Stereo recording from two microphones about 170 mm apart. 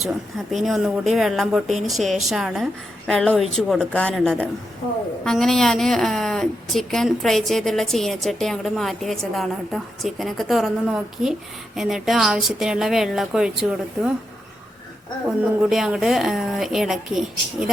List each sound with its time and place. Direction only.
0.0 s a woman's voice: centre (ahead or behind)
15.7 s a woman's voice: centre (ahead or behind)